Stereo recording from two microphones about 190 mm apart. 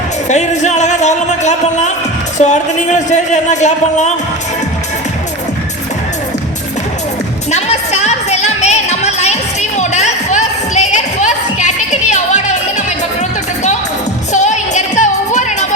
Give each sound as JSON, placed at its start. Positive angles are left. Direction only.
{"t": 0.3, "sound": "a man's voice", "side_deg": 40}
{"t": 7.5, "sound": "music", "side_deg": 35}
{"t": 14.3, "sound": "music", "side_deg": 40}